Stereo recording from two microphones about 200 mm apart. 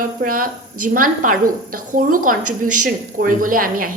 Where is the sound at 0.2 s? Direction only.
45° right (ahead or behind).